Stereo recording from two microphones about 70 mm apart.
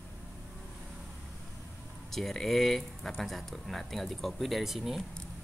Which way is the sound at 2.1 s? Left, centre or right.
Centre.